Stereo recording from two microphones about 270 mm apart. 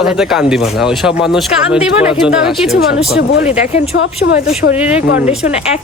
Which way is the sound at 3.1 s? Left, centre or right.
Left.